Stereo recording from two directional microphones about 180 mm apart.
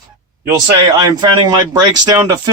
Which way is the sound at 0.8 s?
25° right (ahead or behind).